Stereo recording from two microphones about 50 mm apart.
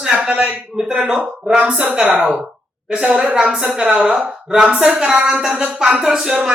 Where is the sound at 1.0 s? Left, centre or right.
Right.